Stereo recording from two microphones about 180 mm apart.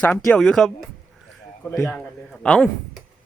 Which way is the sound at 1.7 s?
Centre (ahead or behind).